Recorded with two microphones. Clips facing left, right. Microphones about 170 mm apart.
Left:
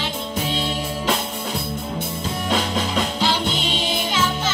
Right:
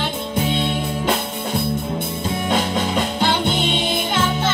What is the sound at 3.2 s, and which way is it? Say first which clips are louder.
Music: right 3 dB; 55° right (ahead or behind).